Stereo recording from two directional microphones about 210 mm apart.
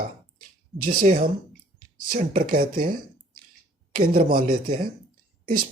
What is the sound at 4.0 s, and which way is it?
Speech, 45° right (ahead or behind).